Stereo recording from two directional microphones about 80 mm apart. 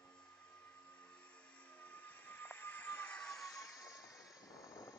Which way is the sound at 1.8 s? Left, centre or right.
Centre.